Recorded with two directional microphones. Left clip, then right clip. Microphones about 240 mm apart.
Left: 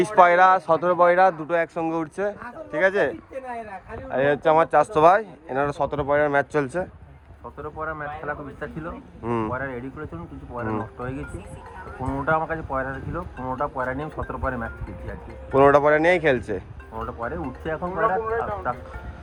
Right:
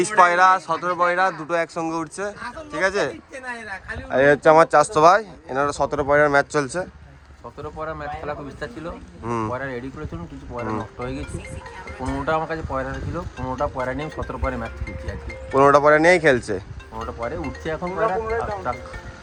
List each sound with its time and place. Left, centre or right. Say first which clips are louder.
0.2 s speech: even; centre
4.1 s speech: right 5 dB; right
5.8 s speech: right 5 dB; right
7.6 s speech: even; right
9.2 s speech: right 1 dB; centre
9.5 s speech: right 1 dB; right
10.7 s speech: right 1 dB; right
12.0 s speech: even; right
15.5 s speech: right 2 dB; centre; by 18.8 s right